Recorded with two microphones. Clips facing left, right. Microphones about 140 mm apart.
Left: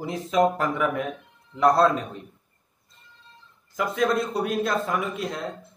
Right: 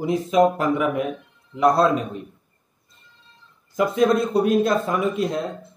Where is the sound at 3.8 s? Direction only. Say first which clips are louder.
Right 5 dB; 20° right (ahead or behind).